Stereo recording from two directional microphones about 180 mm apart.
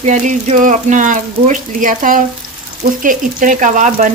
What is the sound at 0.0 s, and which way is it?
Frying, 40° right (ahead or behind).